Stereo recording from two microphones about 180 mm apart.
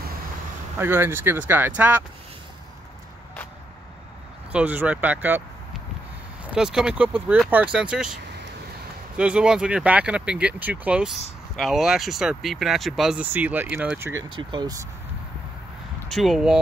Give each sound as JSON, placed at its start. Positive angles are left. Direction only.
{"t": 0.7, "sound": "speech", "side_deg": -10}
{"t": 4.5, "sound": "speech", "side_deg": -10}
{"t": 14.3, "sound": "speech", "side_deg": -25}
{"t": 16.1, "sound": "speech", "side_deg": 0}